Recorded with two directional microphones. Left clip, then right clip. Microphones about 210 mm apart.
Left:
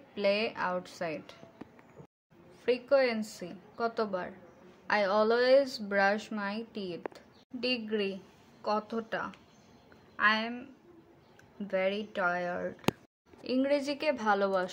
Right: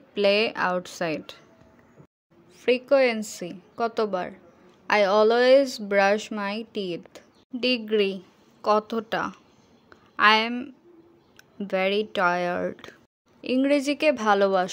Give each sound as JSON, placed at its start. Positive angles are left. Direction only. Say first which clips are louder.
{"t": 0.1, "sound": "a woman's voice", "louder": "right 8 dB", "side_deg": -40}
{"t": 2.6, "sound": "a woman's voice", "louder": "right 7 dB", "side_deg": -40}